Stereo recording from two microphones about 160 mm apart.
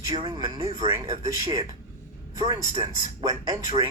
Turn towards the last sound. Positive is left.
turn(degrees=-25)  # may be behind; listen again after turning